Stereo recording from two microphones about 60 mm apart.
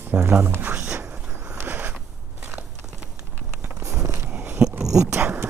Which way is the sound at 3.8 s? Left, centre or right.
Right.